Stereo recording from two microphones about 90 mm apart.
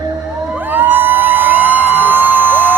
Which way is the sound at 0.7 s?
20° right (ahead or behind).